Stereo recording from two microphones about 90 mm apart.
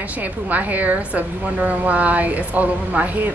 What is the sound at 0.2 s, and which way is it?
A woman's voice, 20° right (ahead or behind).